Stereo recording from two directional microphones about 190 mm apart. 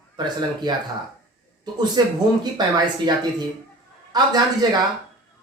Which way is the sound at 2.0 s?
20° right (ahead or behind).